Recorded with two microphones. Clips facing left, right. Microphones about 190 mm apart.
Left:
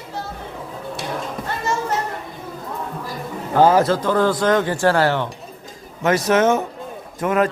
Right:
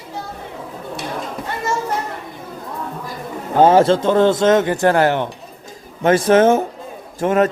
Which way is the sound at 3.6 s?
25° right (ahead or behind).